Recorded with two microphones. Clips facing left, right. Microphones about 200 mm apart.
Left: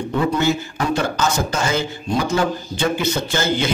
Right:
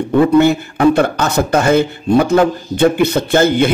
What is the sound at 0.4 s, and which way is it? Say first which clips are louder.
Speech: right 9 dB; 60° right (ahead or behind).